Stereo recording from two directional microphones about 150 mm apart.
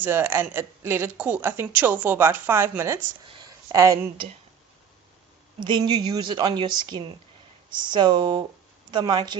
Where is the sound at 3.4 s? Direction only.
20° right (ahead or behind).